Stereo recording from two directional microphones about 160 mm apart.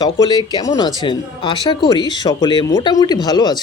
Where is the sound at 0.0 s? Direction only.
25° left (ahead or behind).